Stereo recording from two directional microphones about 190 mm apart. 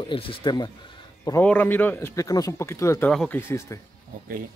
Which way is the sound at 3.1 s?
Centre (ahead or behind).